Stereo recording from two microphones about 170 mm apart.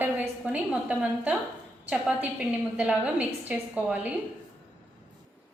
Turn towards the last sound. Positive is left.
turn(degrees=-10)  # may be behind; listen again after turning